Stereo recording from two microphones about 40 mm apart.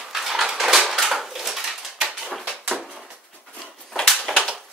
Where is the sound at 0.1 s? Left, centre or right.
Centre.